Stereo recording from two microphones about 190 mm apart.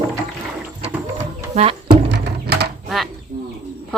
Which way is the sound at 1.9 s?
60° right (ahead or behind).